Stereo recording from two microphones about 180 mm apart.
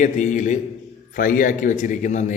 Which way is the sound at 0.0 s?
45° left (ahead or behind).